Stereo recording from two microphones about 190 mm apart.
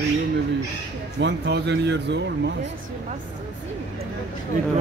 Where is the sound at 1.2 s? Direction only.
60° right (ahead or behind).